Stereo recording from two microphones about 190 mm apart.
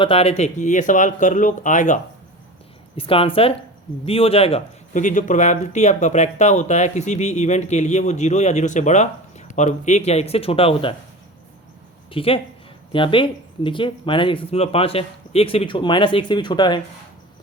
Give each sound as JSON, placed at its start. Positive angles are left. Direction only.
{"t": 0.0, "sound": "speech", "side_deg": 30}
{"t": 3.0, "sound": "speech", "side_deg": 30}
{"t": 12.1, "sound": "speech", "side_deg": 30}